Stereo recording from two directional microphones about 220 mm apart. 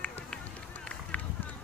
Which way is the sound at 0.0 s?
5° left (ahead or behind).